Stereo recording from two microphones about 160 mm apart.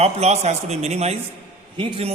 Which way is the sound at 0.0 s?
45° right (ahead or behind).